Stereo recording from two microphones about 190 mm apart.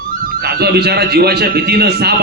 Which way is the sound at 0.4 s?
55° right (ahead or behind).